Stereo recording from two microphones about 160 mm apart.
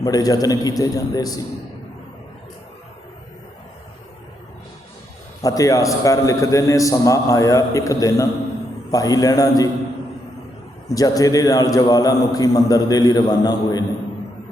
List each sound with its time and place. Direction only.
0.0 s a man's voice: 25° left (ahead or behind)
5.4 s a man's voice: 20° left (ahead or behind)
10.8 s a man's voice: 20° left (ahead or behind)